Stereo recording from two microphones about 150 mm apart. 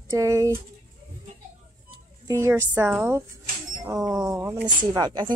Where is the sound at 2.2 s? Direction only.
20° right (ahead or behind).